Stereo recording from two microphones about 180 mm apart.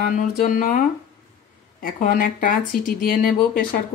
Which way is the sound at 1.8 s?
50° left (ahead or behind).